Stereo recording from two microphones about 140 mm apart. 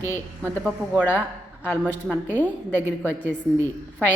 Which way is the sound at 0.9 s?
15° left (ahead or behind).